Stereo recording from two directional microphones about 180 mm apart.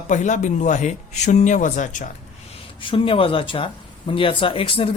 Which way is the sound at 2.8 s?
30° left (ahead or behind).